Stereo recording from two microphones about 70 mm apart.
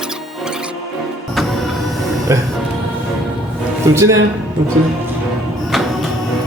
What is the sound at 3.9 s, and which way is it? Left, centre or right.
Speech, right.